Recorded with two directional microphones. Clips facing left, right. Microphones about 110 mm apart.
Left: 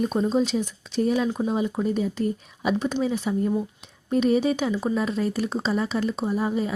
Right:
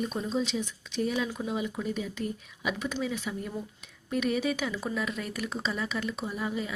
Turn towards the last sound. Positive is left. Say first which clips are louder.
# left 8 dB
turn(degrees=35)  # may be behind; listen again after turning